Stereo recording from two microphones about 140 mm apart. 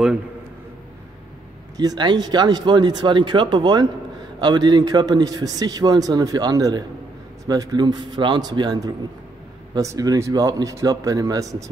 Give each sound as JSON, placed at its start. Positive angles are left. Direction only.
{"t": 1.8, "sound": "a man's voice", "side_deg": -30}